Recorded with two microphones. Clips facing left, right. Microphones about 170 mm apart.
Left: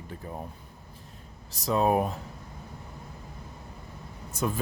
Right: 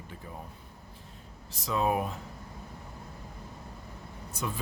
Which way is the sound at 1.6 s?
40° left (ahead or behind).